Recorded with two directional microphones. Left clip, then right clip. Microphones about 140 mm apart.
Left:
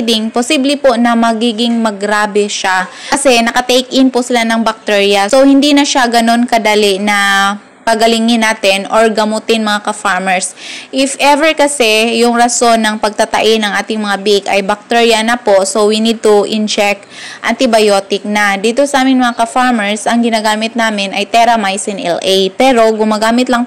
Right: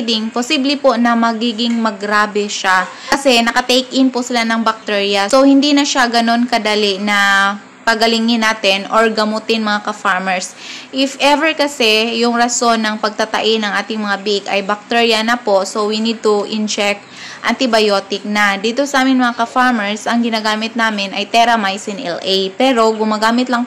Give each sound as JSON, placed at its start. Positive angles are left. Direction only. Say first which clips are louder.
{"t": 0.0, "sound": "a woman's voice", "louder": "left 5 dB", "side_deg": 40}